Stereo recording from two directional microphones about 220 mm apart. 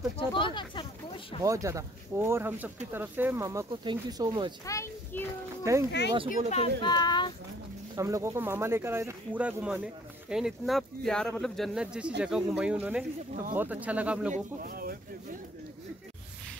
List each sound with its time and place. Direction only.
0.3 s speech: 20° left (ahead or behind)
1.4 s speech: 15° right (ahead or behind)
4.6 s a sound: 10° left (ahead or behind)
5.6 s speech: 15° right (ahead or behind)
5.9 s speech: 50° left (ahead or behind)
6.8 s speech: 20° left (ahead or behind)
7.9 s speech: 15° right (ahead or behind)
14.3 s speech: 40° right (ahead or behind)